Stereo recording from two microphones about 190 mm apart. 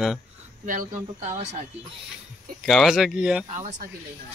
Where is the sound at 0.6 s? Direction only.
45° right (ahead or behind).